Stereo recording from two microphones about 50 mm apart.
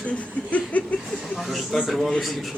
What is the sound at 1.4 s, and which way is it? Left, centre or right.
Speech, centre.